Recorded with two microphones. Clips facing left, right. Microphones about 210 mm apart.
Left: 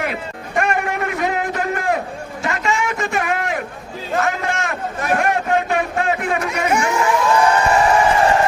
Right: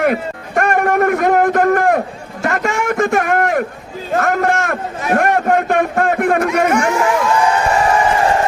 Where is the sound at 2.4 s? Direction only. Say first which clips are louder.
Right 4 dB; 50° right (ahead or behind).